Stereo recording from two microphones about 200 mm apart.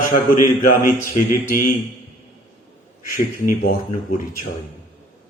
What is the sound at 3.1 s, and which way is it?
A man's voice, 45° left (ahead or behind).